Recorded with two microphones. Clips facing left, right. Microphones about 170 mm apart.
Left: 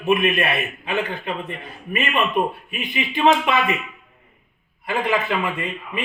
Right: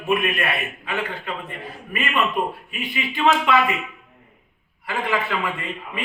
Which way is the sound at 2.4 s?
20° left (ahead or behind).